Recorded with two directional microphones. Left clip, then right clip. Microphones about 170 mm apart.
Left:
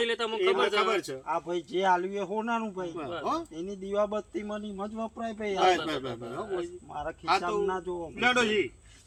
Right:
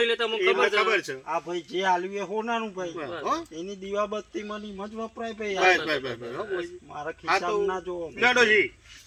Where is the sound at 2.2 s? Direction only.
10° left (ahead or behind).